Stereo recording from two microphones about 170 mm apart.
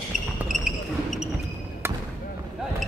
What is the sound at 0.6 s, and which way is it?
Basketball bounce, 5° right (ahead or behind).